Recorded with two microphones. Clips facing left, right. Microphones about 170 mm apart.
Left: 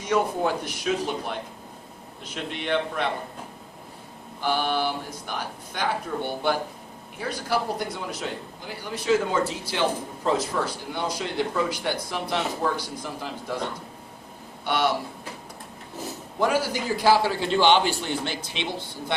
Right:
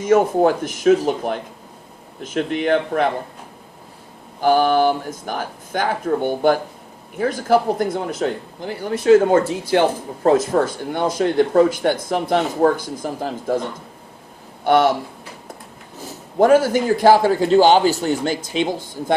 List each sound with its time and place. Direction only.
0.0 s speech: 45° right (ahead or behind)
4.4 s speech: 45° right (ahead or behind)
14.6 s speech: 50° right (ahead or behind)
16.4 s speech: 50° right (ahead or behind)